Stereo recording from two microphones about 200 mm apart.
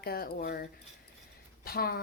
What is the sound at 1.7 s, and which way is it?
Speech, 50° left (ahead or behind).